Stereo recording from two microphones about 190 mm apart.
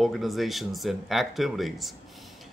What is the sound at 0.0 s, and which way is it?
Speech, centre (ahead or behind).